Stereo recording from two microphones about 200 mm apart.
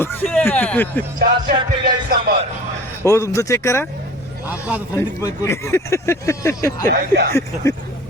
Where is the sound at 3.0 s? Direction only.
15° left (ahead or behind).